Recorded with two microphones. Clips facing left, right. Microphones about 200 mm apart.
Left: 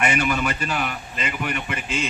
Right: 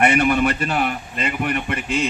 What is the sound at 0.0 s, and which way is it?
Speech, 55° right (ahead or behind).